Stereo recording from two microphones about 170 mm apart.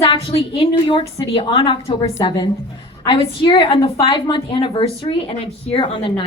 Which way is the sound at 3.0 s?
30° left (ahead or behind).